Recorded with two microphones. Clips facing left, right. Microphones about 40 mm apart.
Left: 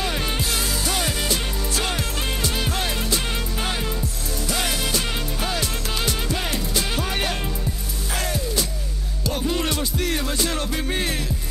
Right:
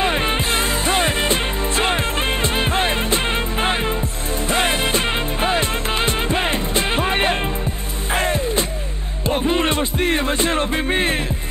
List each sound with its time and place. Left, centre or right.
0.0 s music: right